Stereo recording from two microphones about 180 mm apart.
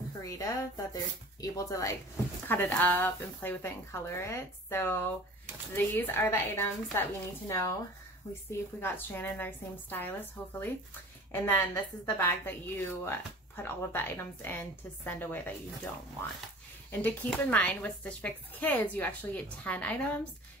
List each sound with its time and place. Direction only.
0.2 s speech: 20° left (ahead or behind)